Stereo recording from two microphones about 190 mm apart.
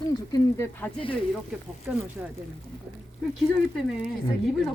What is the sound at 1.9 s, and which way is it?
Speech, 10° right (ahead or behind).